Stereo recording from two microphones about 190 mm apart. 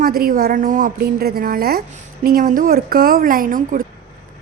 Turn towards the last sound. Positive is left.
turn(degrees=-45)  # may be behind; listen again after turning